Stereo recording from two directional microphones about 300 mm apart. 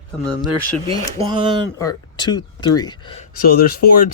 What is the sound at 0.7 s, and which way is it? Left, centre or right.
Speech, centre.